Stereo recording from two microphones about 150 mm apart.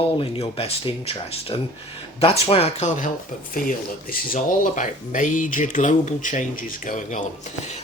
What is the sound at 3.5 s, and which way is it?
Speech, 75° left (ahead or behind).